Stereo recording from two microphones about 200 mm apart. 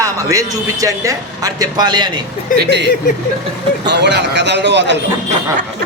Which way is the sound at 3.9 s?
60° right (ahead or behind).